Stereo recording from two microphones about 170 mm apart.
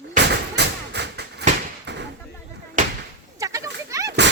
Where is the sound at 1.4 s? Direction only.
85° right.